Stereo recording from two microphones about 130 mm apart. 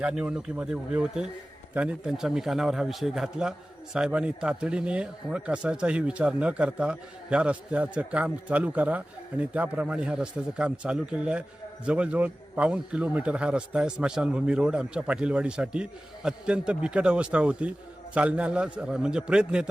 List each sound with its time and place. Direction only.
0.0 s a man's voice: 5° right (ahead or behind)